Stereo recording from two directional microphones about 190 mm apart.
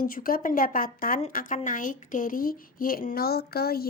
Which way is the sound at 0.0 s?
50° left (ahead or behind).